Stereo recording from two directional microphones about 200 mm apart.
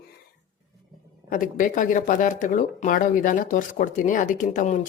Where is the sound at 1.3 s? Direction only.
40° left (ahead or behind).